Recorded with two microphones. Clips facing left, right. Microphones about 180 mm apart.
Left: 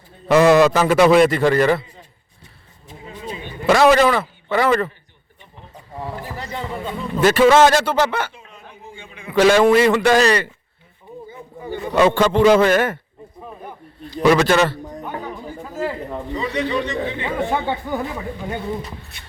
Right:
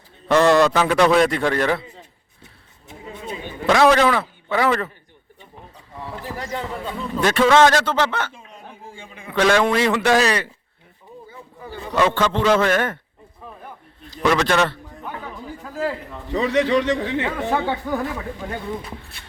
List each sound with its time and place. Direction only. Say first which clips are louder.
0.3 s a man's voice: left 3 dB; 5° left (ahead or behind)
3.7 s a man's voice: left 2 dB; 5° left (ahead or behind)
6.4 s a man's voice: even; centre (ahead or behind)
9.3 s a man's voice: left 5 dB; 5° left (ahead or behind)
11.6 s speech: left 4 dB; 15° left (ahead or behind)
14.2 s a man's voice: left 4 dB; 5° left (ahead or behind)
16.3 s a man's voice: right 5 dB; 90° right
17.2 s a man's voice: left 4 dB; centre (ahead or behind)
17.7 s speech: even; 15° left (ahead or behind)